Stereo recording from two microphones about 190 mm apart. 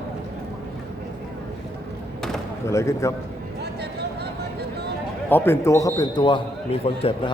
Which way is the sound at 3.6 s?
60° right (ahead or behind).